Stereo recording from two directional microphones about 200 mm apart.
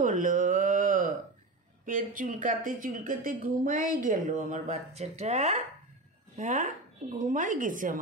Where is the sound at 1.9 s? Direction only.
40° right (ahead or behind).